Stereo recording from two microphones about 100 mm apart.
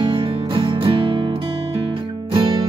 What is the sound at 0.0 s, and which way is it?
Music, 55° right (ahead or behind).